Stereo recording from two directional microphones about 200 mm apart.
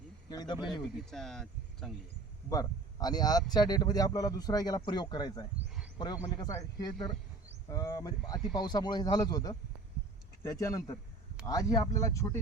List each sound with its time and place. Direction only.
0.3 s a man's voice: 20° left (ahead or behind)
0.9 s speech: centre (ahead or behind)
2.5 s a man's voice: 20° left (ahead or behind)